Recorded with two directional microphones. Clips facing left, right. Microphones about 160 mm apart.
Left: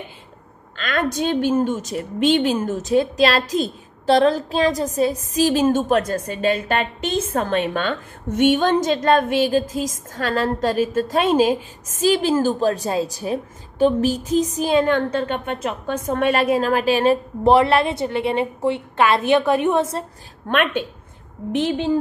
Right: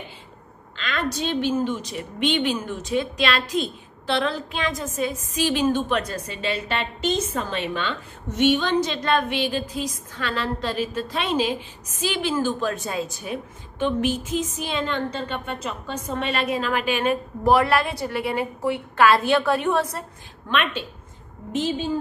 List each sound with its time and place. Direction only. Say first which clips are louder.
0.7 s a woman's voice: left 5 dB; 50° left (ahead or behind); by 20.1 s 25° left (ahead or behind)
20.4 s a woman's voice: left 5 dB; 55° left (ahead or behind)
21.5 s a woman's voice: left 4 dB; 65° left (ahead or behind)